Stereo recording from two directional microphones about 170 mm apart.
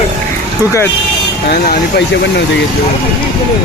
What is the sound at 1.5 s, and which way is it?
Speech, 75° left (ahead or behind).